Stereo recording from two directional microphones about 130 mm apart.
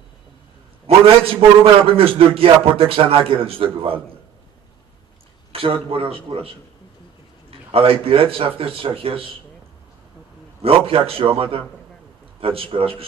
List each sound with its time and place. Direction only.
0.8 s a sound: 45° right (ahead or behind)
1.6 s a man's voice: 45° right (ahead or behind)
5.5 s a man's voice: 45° right (ahead or behind)
7.7 s a man's voice: 45° right (ahead or behind)
10.6 s a man's voice: 45° right (ahead or behind)